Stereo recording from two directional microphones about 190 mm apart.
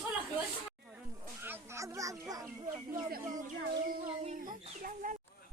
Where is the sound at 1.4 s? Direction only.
10° right (ahead or behind).